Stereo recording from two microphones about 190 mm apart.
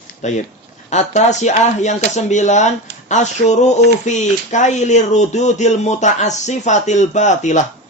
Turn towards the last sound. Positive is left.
turn(degrees=40)  # may be behind; listen again after turning